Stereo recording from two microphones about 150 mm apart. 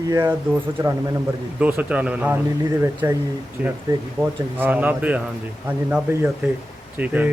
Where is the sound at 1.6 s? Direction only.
10° right (ahead or behind).